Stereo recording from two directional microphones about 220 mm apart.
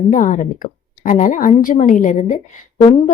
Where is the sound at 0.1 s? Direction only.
35° left (ahead or behind).